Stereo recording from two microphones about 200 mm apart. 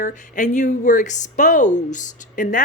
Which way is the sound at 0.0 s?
40° left (ahead or behind).